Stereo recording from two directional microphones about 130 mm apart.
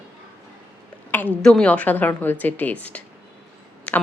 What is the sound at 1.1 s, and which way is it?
A woman's voice, 15° left (ahead or behind).